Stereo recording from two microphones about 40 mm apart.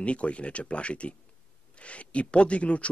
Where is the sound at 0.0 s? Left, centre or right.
Left.